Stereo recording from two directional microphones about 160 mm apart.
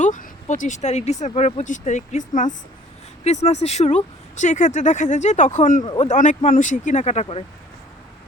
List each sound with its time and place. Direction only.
0.0 s speech: 50° left (ahead or behind)
5.8 s speech: 30° left (ahead or behind)
6.1 s speech: 50° left (ahead or behind)